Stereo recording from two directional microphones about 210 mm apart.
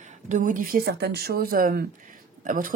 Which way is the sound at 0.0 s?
35° right (ahead or behind).